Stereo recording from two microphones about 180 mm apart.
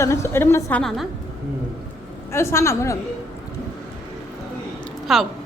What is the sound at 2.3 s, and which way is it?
Speech, 15° left (ahead or behind).